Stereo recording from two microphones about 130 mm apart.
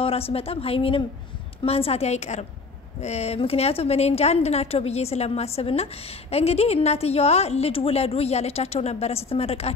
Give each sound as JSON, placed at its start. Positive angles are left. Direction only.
{"t": 0.0, "sound": "a woman's voice", "side_deg": 50}